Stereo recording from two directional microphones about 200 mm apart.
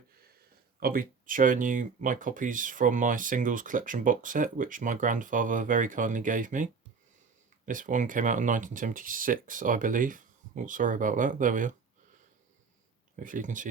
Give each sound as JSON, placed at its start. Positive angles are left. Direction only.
{"t": 0.8, "sound": "speech", "side_deg": -45}
{"t": 13.1, "sound": "speech", "side_deg": -40}